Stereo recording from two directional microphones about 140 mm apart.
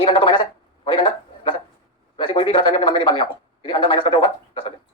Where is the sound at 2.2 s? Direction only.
40° left (ahead or behind).